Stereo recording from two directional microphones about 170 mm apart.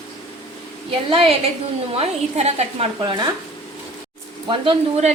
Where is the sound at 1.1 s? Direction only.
30° right (ahead or behind).